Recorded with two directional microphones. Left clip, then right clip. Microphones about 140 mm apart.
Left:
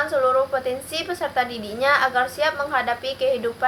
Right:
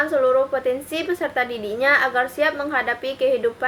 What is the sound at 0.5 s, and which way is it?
A woman's voice, 30° right (ahead or behind).